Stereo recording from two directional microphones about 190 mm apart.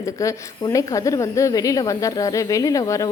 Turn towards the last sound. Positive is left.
turn(degrees=15)  # may be behind; listen again after turning